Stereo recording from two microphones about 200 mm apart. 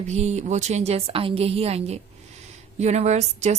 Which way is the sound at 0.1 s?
35° right (ahead or behind).